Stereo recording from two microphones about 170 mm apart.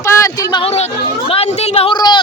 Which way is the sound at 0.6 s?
40° left (ahead or behind).